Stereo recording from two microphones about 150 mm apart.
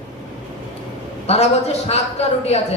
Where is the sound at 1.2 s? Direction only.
45° left (ahead or behind).